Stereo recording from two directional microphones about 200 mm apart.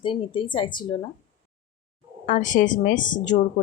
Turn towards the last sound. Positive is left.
turn(degrees=40)  # may be behind; listen again after turning